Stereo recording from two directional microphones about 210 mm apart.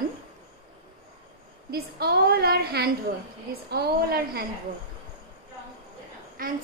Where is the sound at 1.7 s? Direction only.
50° right (ahead or behind).